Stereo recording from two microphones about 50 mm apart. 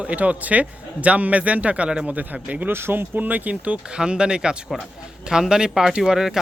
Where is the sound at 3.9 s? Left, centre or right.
Centre.